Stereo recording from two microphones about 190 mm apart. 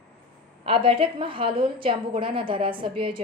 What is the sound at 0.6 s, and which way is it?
A woman's voice, 30° right (ahead or behind).